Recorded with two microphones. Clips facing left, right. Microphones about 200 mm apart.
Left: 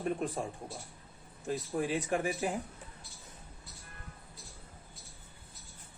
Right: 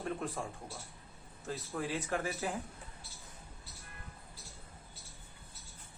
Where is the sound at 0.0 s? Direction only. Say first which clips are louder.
Left 4 dB; 20° left (ahead or behind).